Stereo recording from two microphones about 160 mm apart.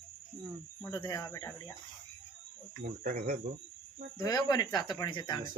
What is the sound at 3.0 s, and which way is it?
Speech, 65° right (ahead or behind).